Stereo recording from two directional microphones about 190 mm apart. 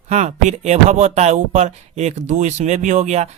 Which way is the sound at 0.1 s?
35° right (ahead or behind).